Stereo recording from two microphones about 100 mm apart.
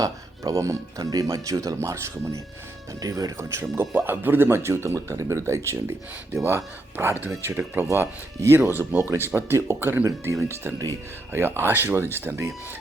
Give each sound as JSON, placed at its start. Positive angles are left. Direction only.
{"t": 0.0, "sound": "speech", "side_deg": -35}
{"t": 3.6, "sound": "speech", "side_deg": -20}